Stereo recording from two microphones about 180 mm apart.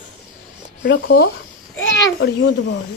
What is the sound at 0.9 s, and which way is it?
Speech, 60° left (ahead or behind).